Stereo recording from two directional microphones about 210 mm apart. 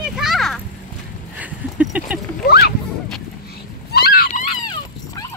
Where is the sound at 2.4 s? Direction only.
45° left (ahead or behind).